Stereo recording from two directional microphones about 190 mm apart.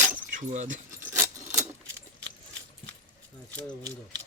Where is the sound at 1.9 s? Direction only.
70° right (ahead or behind).